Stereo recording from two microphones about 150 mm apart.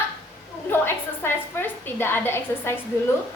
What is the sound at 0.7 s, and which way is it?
A woman's voice, 15° left (ahead or behind).